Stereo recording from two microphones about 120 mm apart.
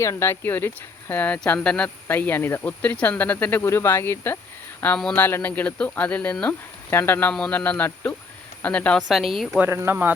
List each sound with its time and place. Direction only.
0.0 s speech: 25° left (ahead or behind)
9.0 s speech: centre (ahead or behind)
9.6 s speech: 20° right (ahead or behind)